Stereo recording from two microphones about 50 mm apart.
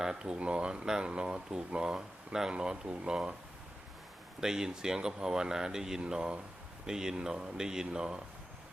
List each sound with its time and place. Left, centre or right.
0.0 s speech: centre
0.3 s speech: right
4.4 s speech: centre